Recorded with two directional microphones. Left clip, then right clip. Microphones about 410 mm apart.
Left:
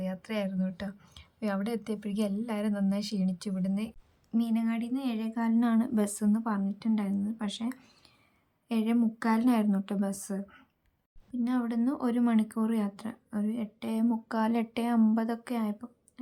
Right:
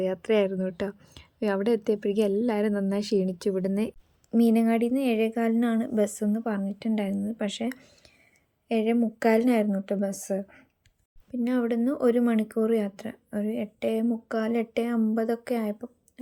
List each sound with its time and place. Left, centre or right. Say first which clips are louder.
0.0 s speech: right 11 dB; centre
11.4 s speech: right 5 dB; centre